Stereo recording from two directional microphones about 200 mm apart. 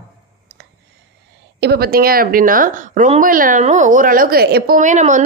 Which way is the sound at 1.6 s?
50° right (ahead or behind).